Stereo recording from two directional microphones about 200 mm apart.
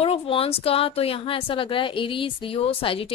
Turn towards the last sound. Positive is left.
turn(degrees=25)  # may be behind; listen again after turning